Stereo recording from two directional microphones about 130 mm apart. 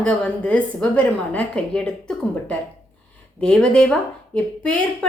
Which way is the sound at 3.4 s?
5° left (ahead or behind).